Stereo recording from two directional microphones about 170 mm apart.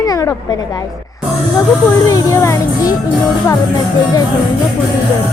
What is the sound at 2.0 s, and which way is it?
Speech, 20° left (ahead or behind).